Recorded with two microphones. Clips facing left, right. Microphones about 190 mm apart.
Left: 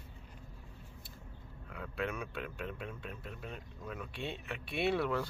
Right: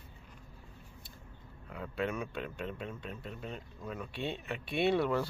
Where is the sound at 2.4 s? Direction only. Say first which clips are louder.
Right 2 dB; 30° right (ahead or behind).